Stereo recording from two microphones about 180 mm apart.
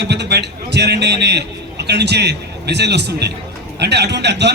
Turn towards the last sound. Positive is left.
turn(degrees=-70)  # may be behind; listen again after turning